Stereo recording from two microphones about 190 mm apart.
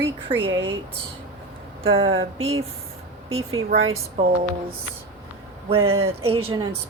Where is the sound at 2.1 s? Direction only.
90° right.